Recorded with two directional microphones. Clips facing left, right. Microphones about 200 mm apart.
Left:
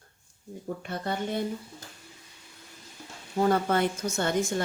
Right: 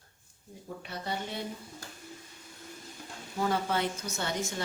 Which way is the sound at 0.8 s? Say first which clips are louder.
Left 4 dB; 50° left (ahead or behind).